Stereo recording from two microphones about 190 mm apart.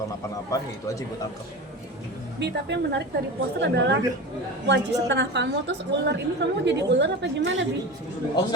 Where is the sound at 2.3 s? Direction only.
65° right (ahead or behind).